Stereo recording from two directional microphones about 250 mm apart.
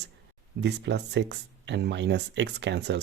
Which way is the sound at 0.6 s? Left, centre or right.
Right.